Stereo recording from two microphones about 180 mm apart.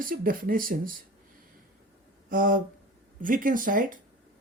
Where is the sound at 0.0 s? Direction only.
50° right (ahead or behind).